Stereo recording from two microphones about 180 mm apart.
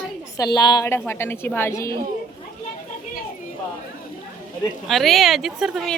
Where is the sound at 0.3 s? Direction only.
20° left (ahead or behind).